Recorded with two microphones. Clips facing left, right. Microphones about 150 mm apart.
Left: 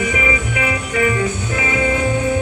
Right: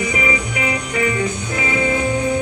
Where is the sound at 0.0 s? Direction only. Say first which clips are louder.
Left 1 dB; 35° right (ahead or behind).